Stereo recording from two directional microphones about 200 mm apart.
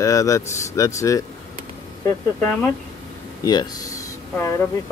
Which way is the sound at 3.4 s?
20° left (ahead or behind).